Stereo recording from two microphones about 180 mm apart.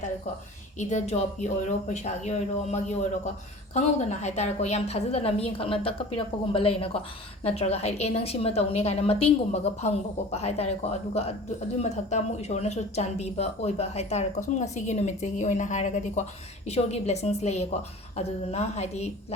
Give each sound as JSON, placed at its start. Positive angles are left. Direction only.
{"t": 0.8, "sound": "speech", "side_deg": 40}